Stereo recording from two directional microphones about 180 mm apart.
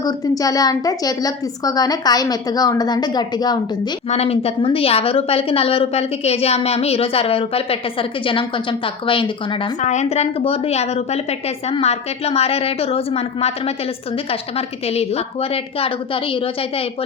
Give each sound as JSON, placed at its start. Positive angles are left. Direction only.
{"t": 0.0, "sound": "a woman's voice", "side_deg": 20}
{"t": 4.1, "sound": "a woman's voice", "side_deg": 35}
{"t": 9.8, "sound": "a woman's voice", "side_deg": 40}